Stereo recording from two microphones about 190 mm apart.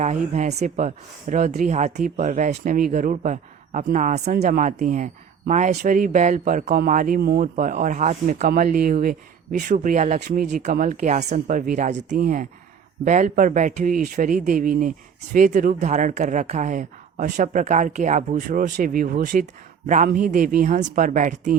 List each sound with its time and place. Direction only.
0.0 s speech: 35° right (ahead or behind); by 7.5 s 55° right (ahead or behind)
7.5 s speech: 40° right (ahead or behind)
10.2 s speech: 60° right (ahead or behind)
10.4 s speech: 40° right (ahead or behind)